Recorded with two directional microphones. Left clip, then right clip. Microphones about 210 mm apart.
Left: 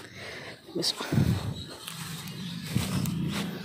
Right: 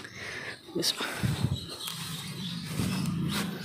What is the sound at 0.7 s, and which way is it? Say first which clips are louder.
Speech: even; 5° right (ahead or behind).